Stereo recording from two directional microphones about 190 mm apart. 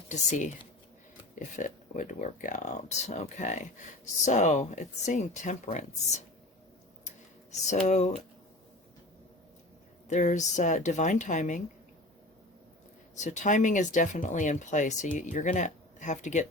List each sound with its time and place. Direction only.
0.1 s speech: 40° left (ahead or behind)
7.7 s speech: 40° left (ahead or behind)
10.1 s speech: 40° left (ahead or behind)
13.2 s speech: 40° left (ahead or behind)